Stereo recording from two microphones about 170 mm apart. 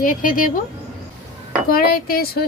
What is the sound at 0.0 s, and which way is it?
Speech, 55° left (ahead or behind).